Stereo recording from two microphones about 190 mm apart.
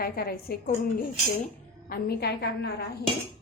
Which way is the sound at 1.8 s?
50° left (ahead or behind).